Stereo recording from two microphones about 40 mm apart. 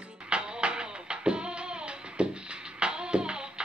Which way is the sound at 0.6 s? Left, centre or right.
Right.